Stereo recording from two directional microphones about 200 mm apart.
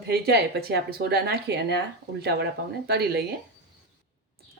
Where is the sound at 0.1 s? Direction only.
55° right (ahead or behind).